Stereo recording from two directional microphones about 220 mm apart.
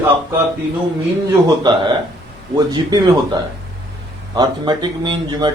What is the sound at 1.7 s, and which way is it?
Speech, 20° right (ahead or behind).